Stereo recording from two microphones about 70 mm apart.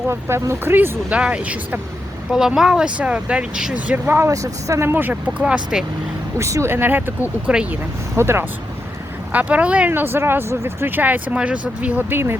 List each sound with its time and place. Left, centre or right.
0.1 s speech: right
1.1 s speech: centre
2.6 s speech: centre
4.3 s speech: right
4.9 s speech: right
5.7 s speech: centre
6.4 s speech: right
9.3 s speech: right
9.9 s speech: right
10.8 s speech: right
12.0 s speech: right